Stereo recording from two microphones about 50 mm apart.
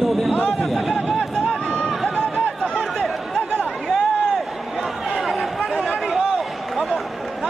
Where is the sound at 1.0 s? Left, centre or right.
Centre.